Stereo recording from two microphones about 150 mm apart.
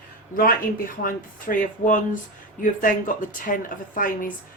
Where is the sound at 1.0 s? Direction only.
65° left (ahead or behind).